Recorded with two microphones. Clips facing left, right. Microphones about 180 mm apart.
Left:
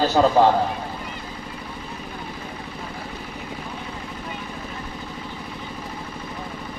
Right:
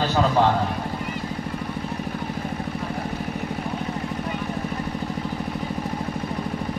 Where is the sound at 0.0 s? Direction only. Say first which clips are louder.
Left 4 dB; 40° left (ahead or behind).